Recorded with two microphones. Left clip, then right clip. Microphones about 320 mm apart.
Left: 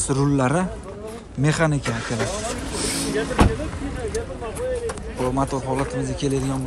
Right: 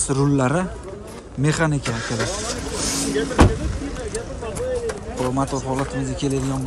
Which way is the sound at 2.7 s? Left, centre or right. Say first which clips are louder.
Right 2 dB; centre.